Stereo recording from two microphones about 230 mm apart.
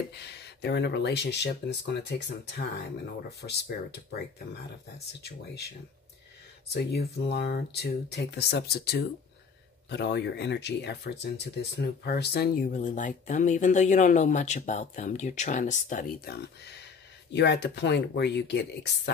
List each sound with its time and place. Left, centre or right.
0.1 s speech: left
5.2 s speech: left
6.7 s speech: left